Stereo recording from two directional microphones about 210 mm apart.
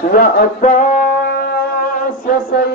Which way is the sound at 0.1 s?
45° left (ahead or behind).